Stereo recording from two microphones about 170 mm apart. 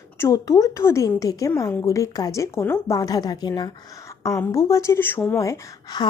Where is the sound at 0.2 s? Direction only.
20° left (ahead or behind).